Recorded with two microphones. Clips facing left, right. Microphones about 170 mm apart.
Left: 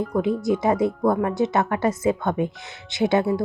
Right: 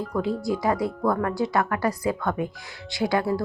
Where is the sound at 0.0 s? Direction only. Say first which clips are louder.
Left 4 dB; 20° left (ahead or behind).